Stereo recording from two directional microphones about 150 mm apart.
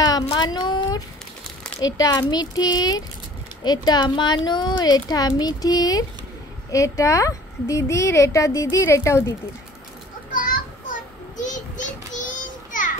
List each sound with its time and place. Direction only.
0.4 s a sound: 30° left (ahead or behind)
1.8 s a woman's voice: 25° left (ahead or behind)
10.3 s children playing: 65° left (ahead or behind)
11.4 s child singing: 55° left (ahead or behind)